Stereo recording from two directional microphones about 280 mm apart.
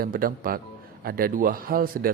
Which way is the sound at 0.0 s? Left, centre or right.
Right.